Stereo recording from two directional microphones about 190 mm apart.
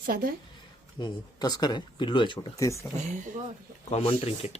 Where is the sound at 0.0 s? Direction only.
50° right (ahead or behind).